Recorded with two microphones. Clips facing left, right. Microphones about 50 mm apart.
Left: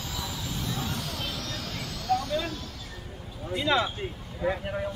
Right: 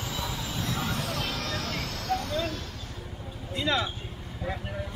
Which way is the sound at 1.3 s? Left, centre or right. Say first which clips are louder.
Right 3 dB; right.